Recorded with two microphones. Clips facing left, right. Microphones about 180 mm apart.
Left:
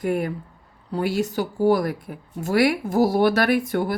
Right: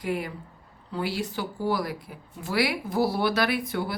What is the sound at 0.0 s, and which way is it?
A woman's voice, 50° left (ahead or behind).